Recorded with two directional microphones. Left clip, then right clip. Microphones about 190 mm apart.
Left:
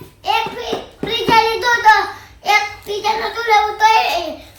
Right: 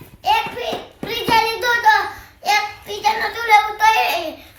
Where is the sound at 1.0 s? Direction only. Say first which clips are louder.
Left 3 dB; 25° right (ahead or behind).